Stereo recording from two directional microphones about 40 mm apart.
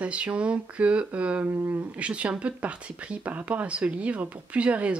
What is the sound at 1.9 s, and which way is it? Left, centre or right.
Speech, right.